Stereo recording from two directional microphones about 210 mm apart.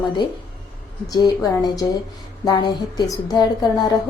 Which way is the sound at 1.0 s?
20° left (ahead or behind).